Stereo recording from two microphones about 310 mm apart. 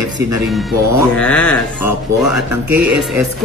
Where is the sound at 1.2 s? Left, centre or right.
Centre.